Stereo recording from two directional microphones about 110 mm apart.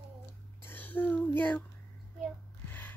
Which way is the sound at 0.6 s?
15° left (ahead or behind).